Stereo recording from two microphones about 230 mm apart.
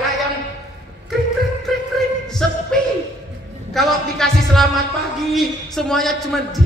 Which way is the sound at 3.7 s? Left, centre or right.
Centre.